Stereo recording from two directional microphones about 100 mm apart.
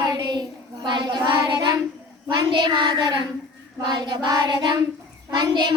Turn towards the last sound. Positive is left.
turn(degrees=-50)  # may be behind; listen again after turning